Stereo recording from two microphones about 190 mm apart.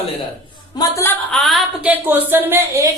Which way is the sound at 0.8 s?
15° left (ahead or behind).